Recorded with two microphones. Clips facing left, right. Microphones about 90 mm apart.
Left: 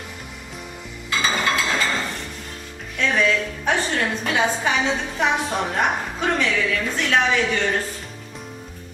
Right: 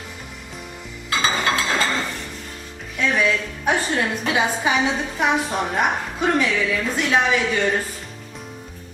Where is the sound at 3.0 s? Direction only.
10° right (ahead or behind).